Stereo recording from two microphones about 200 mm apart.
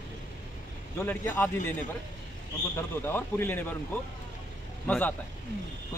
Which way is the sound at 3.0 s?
10° left (ahead or behind).